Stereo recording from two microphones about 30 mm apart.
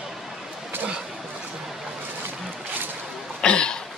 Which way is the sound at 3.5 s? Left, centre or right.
Left.